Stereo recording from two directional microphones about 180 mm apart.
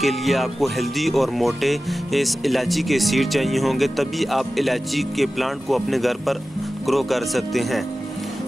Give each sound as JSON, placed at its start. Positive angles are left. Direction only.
{"t": 0.0, "sound": "speech", "side_deg": 0}